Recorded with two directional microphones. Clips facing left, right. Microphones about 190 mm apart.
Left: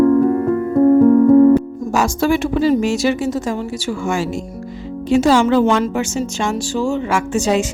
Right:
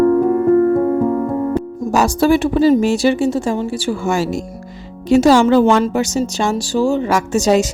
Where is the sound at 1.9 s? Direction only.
35° right (ahead or behind).